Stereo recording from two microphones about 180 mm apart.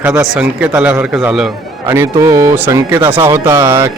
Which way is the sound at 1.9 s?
15° right (ahead or behind).